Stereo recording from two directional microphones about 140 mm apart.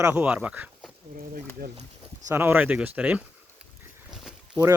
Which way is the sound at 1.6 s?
90° right.